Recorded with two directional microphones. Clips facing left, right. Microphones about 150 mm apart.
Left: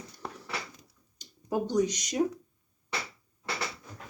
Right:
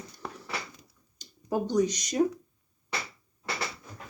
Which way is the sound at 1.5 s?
10° left (ahead or behind).